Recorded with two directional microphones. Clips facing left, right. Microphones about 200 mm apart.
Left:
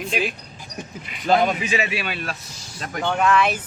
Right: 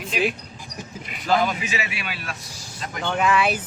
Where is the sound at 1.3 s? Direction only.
30° left (ahead or behind).